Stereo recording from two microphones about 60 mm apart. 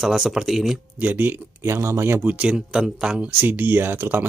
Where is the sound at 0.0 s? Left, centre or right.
Centre.